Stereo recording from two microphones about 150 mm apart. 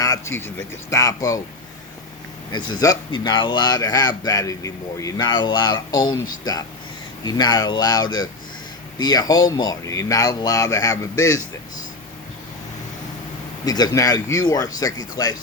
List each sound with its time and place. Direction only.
0.0 s a man's voice: 20° left (ahead or behind)
2.5 s a man's voice: 30° left (ahead or behind)
13.7 s a man's voice: 25° left (ahead or behind)